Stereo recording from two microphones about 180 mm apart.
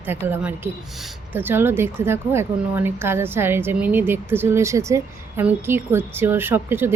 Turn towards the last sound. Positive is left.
turn(degrees=-10)  # may be behind; listen again after turning